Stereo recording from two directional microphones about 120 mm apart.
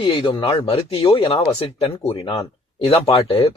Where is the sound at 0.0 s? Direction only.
45° left (ahead or behind).